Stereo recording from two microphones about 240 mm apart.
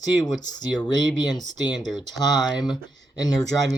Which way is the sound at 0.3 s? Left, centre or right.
Centre.